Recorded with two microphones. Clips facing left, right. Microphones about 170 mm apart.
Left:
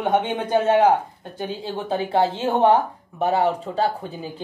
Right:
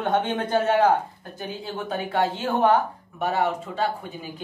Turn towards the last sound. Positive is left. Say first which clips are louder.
# left 4 dB
turn(degrees=35)  # may be behind; listen again after turning